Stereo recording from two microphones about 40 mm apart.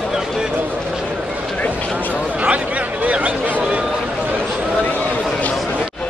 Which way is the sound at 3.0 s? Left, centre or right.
Right.